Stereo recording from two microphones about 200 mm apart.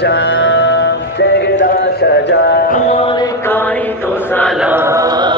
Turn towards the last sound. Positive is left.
turn(degrees=-20)  # may be behind; listen again after turning